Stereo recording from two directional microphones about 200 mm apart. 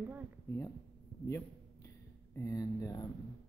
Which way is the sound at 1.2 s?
15° left (ahead or behind).